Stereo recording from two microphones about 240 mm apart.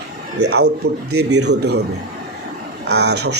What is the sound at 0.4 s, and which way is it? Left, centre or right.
Speech, right.